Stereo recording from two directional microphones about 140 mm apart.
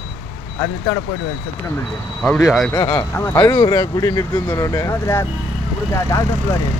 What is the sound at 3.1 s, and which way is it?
Speech, 15° left (ahead or behind).